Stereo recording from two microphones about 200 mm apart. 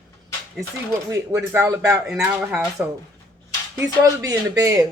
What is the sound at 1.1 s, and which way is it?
Speech, 15° right (ahead or behind).